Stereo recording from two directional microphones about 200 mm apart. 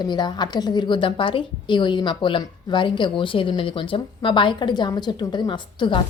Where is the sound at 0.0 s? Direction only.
20° left (ahead or behind).